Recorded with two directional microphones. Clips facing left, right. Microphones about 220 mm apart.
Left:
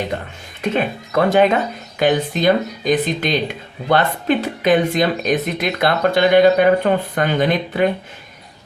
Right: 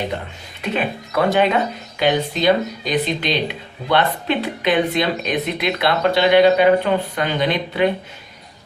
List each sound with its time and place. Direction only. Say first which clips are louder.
0.6 s speech: left 3 dB; 45° left (ahead or behind)